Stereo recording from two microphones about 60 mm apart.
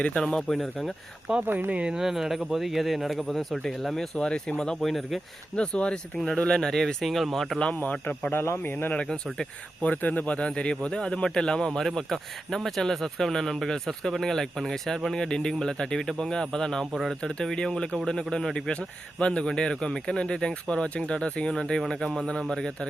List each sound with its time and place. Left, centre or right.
0.0 s a man's voice: centre
1.4 s speech: right
2.0 s speech: centre
5.5 s a man's voice: centre
7.6 s a man's voice: left
8.3 s speech: left
8.7 s a man's voice: left
9.0 s a man's voice: centre
9.8 s a man's voice: left
16.8 s speech: centre
17.1 s a man's voice: centre